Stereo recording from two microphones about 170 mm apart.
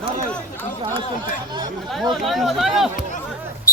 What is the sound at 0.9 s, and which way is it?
Chatter, 25° right (ahead or behind).